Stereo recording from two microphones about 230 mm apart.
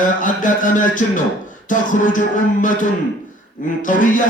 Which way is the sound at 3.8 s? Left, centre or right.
Left.